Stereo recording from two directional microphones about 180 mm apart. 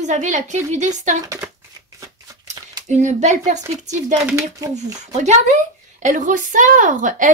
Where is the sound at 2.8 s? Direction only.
40° right (ahead or behind).